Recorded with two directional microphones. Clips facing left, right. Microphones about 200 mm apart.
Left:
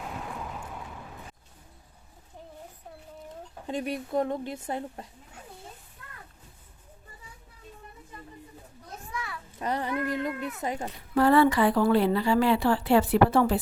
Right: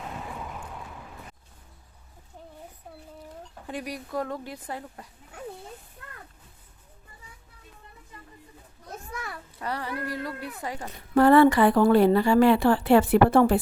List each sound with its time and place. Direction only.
0.0 s vehicle: centre (ahead or behind)
3.7 s speech: 25° left (ahead or behind)
6.0 s a sound: 55° right (ahead or behind)
9.1 s a sound: 45° right (ahead or behind)
9.6 s speech: 20° left (ahead or behind)
11.1 s a woman's voice: 55° right (ahead or behind)